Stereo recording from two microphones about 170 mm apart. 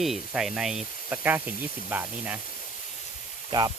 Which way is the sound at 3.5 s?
25° right (ahead or behind).